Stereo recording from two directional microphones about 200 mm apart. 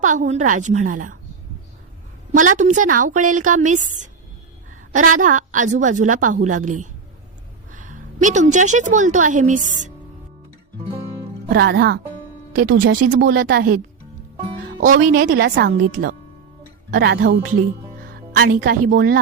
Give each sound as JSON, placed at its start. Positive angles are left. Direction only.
{"t": 0.0, "sound": "a woman's voice", "side_deg": -40}
{"t": 2.3, "sound": "a woman's voice", "side_deg": -40}
{"t": 11.4, "sound": "speech", "side_deg": -55}
{"t": 12.5, "sound": "a woman's voice", "side_deg": -45}
{"t": 12.9, "sound": "speech", "side_deg": -65}
{"t": 14.8, "sound": "a woman's voice", "side_deg": -45}
{"t": 16.9, "sound": "a woman's voice", "side_deg": -50}